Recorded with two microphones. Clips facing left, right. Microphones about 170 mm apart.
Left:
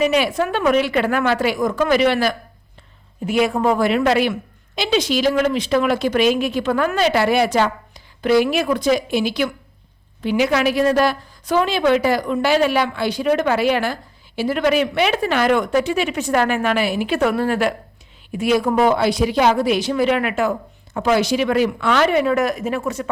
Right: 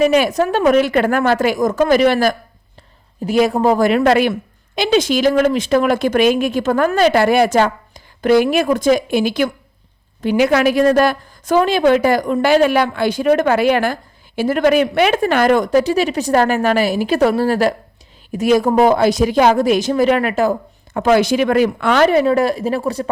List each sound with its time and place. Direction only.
0.0 s a woman's voice: 45° right (ahead or behind)
20.9 s a woman's voice: 55° right (ahead or behind); by 23.0 s 35° right (ahead or behind)